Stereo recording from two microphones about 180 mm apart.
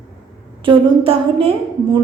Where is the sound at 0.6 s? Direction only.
30° right (ahead or behind).